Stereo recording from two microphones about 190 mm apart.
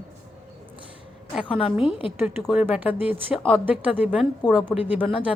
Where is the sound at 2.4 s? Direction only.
5° right (ahead or behind).